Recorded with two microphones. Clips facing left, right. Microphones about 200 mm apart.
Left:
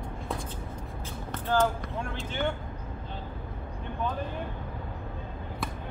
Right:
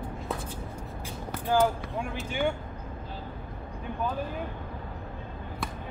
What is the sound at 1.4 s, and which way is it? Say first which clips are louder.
Speech: right 2 dB; 10° right (ahead or behind).